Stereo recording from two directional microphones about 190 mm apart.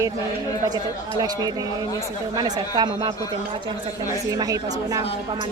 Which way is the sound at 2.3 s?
20° right (ahead or behind).